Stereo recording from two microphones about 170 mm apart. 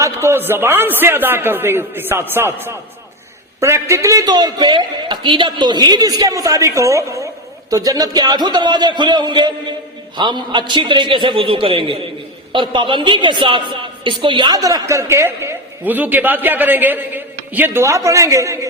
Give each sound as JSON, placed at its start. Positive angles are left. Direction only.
{"t": 0.0, "sound": "a woman's voice", "side_deg": -15}